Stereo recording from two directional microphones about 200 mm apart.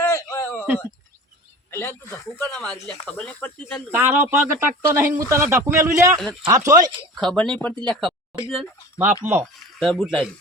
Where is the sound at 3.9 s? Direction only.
10° right (ahead or behind).